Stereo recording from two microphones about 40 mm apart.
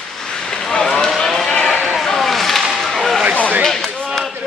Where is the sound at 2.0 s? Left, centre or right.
Centre.